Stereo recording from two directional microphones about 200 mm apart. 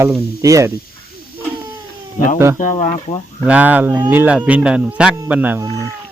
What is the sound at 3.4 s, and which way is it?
Speech, 5° right (ahead or behind).